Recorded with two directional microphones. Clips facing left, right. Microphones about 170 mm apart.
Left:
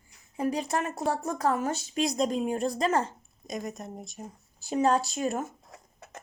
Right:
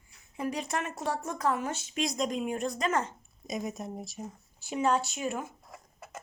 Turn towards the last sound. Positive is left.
turn(degrees=40)  # may be behind; listen again after turning